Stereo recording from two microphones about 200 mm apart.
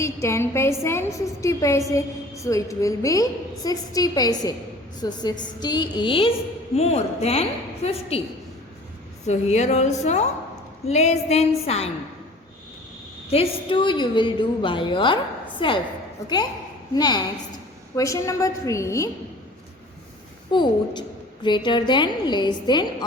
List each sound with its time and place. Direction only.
0.0 s a woman's voice: 15° left (ahead or behind); by 8.2 s 30° left (ahead or behind)
9.2 s a woman's voice: 35° left (ahead or behind)
13.3 s a woman's voice: 25° left (ahead or behind)
20.5 s a woman's voice: 20° left (ahead or behind)